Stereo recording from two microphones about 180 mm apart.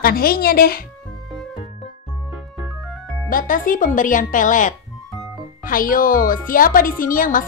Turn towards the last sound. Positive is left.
turn(degrees=50)  # may be behind; listen again after turning